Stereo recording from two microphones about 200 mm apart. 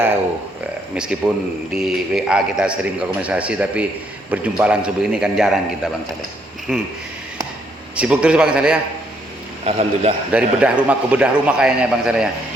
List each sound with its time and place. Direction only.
1.2 s a man's voice: 5° right (ahead or behind)
6.7 s speech: 5° right (ahead or behind)
7.9 s a man's voice: 5° right (ahead or behind)
9.6 s a man's voice: 30° right (ahead or behind)
10.3 s a man's voice: 5° right (ahead or behind)